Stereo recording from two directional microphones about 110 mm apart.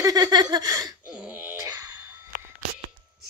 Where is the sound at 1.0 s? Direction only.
15° right (ahead or behind).